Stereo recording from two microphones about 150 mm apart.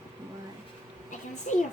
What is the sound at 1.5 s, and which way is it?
Speech, 55° left (ahead or behind).